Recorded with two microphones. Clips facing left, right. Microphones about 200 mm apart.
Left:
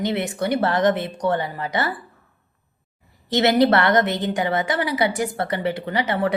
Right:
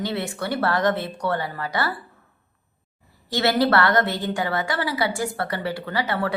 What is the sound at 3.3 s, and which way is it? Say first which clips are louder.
A woman's voice: left 4 dB; 20° left (ahead or behind).